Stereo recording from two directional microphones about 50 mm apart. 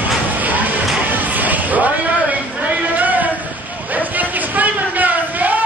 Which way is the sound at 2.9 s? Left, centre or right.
Right.